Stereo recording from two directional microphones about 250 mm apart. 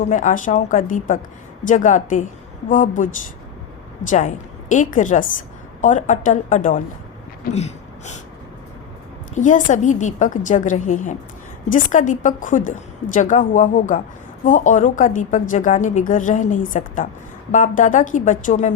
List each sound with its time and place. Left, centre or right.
0.0 s a woman's voice: left
9.3 s a woman's voice: left